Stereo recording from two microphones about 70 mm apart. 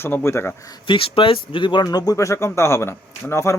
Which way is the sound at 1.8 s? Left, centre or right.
Left.